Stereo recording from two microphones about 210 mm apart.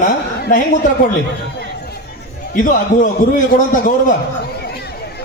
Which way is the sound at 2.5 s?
40° left (ahead or behind).